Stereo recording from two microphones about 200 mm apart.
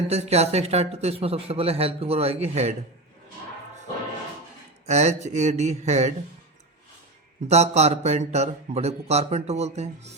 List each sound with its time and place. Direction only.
0.1 s speech: 30° right (ahead or behind)
4.9 s speech: 35° right (ahead or behind)
7.4 s speech: 35° right (ahead or behind)